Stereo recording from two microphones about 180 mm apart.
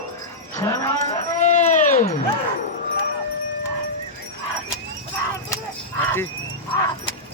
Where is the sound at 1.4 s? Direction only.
40° left (ahead or behind).